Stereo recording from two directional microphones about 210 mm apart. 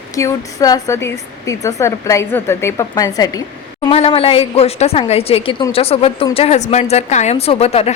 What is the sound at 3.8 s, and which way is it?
A woman's voice, 30° left (ahead or behind).